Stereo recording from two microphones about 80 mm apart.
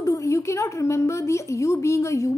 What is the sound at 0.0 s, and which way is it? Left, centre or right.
A woman's voice, left.